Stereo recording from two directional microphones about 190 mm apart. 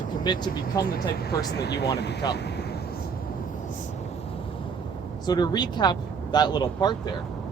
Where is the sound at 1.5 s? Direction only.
60° left (ahead or behind).